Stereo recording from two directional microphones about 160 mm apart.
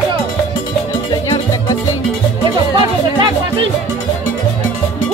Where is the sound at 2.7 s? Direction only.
30° right (ahead or behind).